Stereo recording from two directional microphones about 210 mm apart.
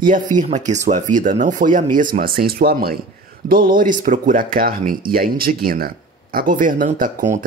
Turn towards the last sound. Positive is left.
turn(degrees=-40)  # may be behind; listen again after turning